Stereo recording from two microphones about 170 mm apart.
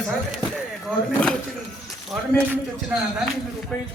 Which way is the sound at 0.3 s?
Centre (ahead or behind).